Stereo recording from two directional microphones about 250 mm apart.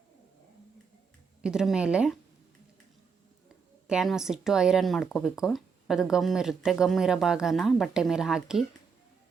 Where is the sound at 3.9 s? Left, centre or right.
Centre.